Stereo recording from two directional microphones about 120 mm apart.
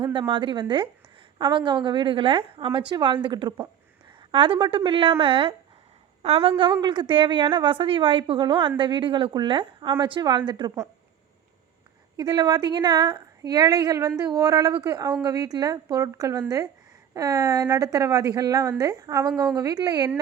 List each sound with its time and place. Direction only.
0.0 s a woman's voice: 45° right (ahead or behind)
12.1 s a woman's voice: 35° right (ahead or behind)